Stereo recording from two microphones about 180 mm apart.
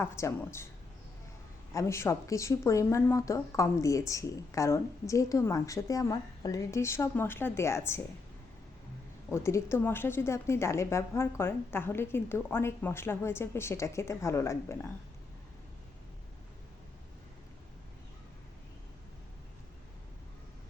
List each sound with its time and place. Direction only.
0.0 s speech: 15° left (ahead or behind)
1.7 s speech: 15° left (ahead or behind)
9.3 s speech: 15° left (ahead or behind)